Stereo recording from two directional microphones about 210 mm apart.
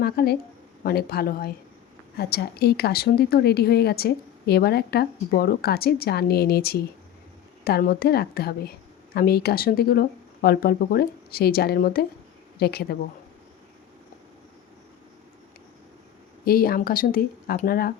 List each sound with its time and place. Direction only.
0.0 s a woman's voice: 50° left (ahead or behind)
16.5 s a woman's voice: 45° left (ahead or behind)